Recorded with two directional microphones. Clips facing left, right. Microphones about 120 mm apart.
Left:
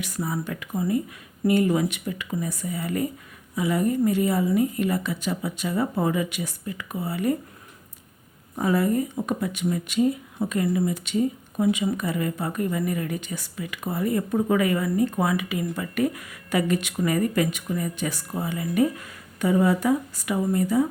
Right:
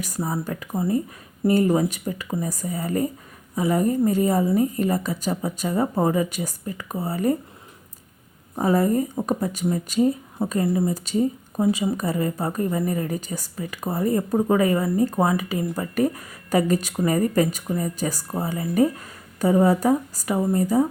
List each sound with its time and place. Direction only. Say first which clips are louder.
0.0 s speech: right 2 dB; 35° right (ahead or behind)
8.5 s speech: right 2 dB; 35° right (ahead or behind)